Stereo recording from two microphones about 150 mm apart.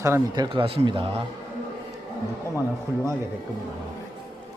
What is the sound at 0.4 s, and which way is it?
Speech, 35° right (ahead or behind).